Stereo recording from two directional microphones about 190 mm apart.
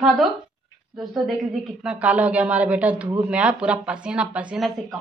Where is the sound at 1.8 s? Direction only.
5° right (ahead or behind).